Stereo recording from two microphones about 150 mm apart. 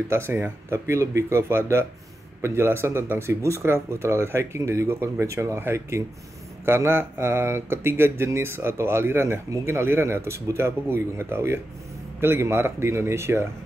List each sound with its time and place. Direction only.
0.1 s speech: 15° right (ahead or behind)